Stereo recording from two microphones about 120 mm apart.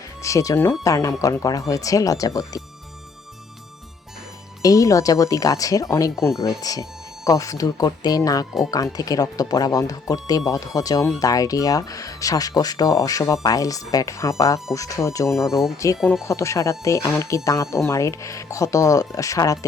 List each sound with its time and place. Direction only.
0.2 s speech: 25° left (ahead or behind)
4.6 s speech: 30° left (ahead or behind)